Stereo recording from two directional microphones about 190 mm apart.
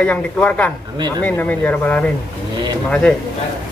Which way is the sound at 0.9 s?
25° right (ahead or behind).